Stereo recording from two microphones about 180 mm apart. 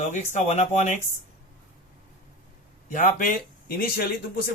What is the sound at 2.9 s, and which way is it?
Speech, 45° left (ahead or behind).